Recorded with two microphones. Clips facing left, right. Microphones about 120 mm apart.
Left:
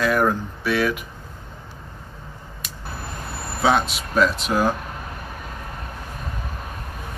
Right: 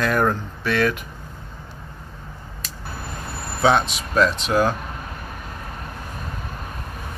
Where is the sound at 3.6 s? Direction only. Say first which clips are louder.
Right 1 dB; 5° left (ahead or behind).